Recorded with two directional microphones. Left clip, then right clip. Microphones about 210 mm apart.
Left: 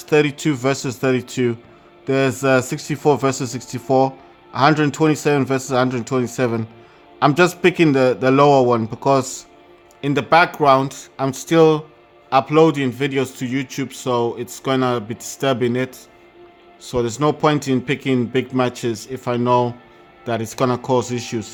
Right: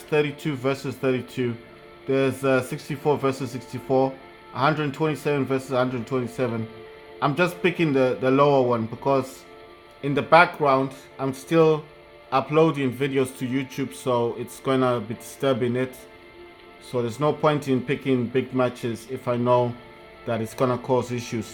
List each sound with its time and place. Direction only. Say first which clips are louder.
0.1 s a man's voice: left 7 dB; 30° left (ahead or behind)